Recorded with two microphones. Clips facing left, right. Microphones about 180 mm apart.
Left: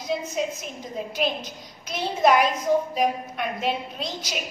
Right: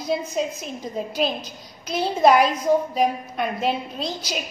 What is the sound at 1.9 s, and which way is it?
A woman's voice, 35° right (ahead or behind).